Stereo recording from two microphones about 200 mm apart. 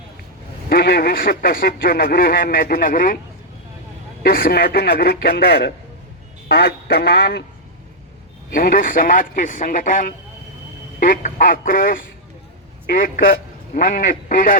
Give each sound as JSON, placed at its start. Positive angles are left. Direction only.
{"t": 0.7, "sound": "speech", "side_deg": 50}
{"t": 4.2, "sound": "speech", "side_deg": 50}
{"t": 8.5, "sound": "speech", "side_deg": 45}